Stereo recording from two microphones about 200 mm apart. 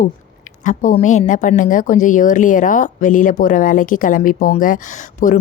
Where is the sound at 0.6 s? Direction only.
40° left (ahead or behind).